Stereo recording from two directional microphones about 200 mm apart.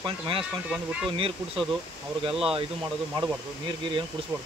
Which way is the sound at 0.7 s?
5° right (ahead or behind).